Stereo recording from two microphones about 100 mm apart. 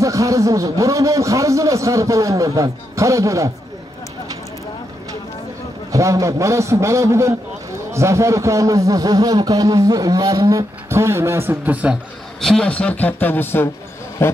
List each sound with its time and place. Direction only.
0.0 s a man's voice: 30° right (ahead or behind)
5.9 s a man's voice: 35° right (ahead or behind)
10.9 s a man's voice: 25° right (ahead or behind)
11.9 s a man's voice: 5° left (ahead or behind); by 14.3 s 25° left (ahead or behind)